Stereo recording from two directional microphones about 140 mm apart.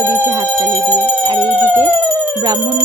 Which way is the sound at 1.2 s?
35° right (ahead or behind).